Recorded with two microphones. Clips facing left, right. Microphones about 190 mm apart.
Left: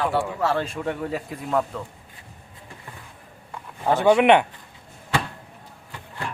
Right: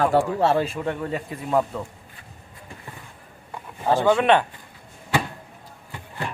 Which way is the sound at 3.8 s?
20° left (ahead or behind).